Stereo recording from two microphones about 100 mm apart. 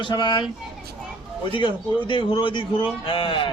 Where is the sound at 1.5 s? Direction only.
55° left (ahead or behind).